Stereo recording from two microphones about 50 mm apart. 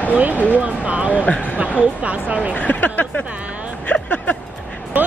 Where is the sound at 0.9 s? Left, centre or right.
Right.